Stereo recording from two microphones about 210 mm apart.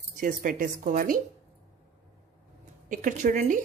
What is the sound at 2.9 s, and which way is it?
Speech, 35° right (ahead or behind).